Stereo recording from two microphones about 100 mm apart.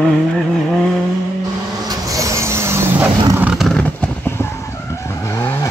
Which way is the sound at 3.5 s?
5° left (ahead or behind).